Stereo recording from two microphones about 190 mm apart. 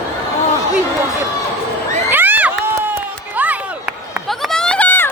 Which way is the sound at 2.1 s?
10° right (ahead or behind).